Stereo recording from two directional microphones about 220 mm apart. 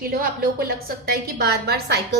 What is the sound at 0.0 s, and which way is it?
A woman's voice, 40° right (ahead or behind).